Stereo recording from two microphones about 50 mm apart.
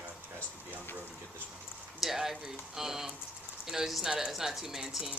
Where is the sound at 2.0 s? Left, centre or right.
Centre.